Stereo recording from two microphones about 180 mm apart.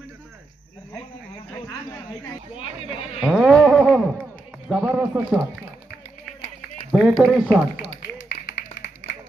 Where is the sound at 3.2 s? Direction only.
5° right (ahead or behind).